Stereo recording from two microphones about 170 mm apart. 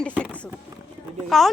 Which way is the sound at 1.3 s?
Centre (ahead or behind).